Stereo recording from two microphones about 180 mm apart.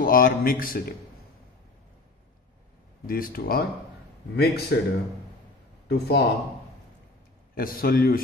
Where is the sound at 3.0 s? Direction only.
55° left (ahead or behind).